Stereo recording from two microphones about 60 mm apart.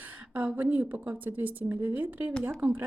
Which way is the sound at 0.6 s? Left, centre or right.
Right.